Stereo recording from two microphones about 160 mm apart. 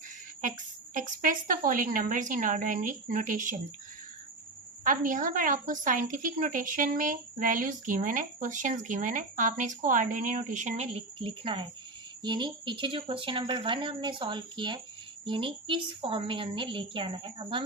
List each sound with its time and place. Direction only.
0.9 s a woman's voice: 55° right (ahead or behind)
4.8 s a woman's voice: 55° right (ahead or behind)
11.2 s speech: 35° right (ahead or behind)